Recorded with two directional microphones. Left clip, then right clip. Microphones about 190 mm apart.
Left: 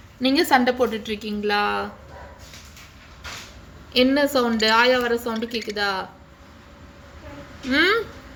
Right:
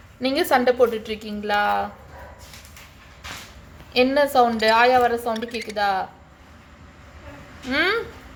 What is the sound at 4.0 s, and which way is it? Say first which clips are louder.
A woman's voice: right 2 dB; 10° right (ahead or behind).